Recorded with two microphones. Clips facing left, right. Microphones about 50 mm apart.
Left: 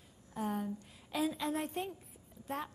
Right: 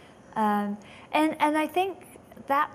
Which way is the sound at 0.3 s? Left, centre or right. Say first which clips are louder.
Right 12 dB; right.